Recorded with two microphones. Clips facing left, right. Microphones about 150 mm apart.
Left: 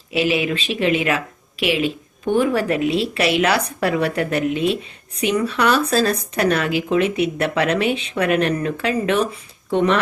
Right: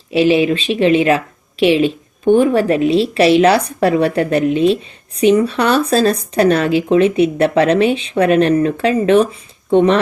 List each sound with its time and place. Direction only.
0.1 s speech: 30° right (ahead or behind)